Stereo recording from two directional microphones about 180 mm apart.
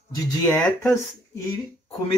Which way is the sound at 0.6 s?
15° left (ahead or behind).